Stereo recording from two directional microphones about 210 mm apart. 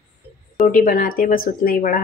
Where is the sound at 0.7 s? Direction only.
40° left (ahead or behind).